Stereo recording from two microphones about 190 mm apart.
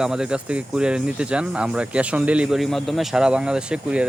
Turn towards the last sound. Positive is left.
turn(degrees=-5)  # may be behind; listen again after turning